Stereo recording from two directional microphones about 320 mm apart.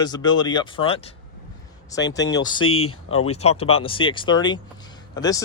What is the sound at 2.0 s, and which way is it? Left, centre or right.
Speech, left.